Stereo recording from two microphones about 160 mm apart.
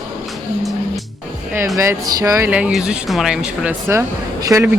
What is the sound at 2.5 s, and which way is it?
Speech, 10° right (ahead or behind).